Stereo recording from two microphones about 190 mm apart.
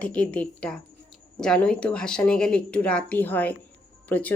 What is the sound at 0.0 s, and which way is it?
A woman's voice, 5° left (ahead or behind).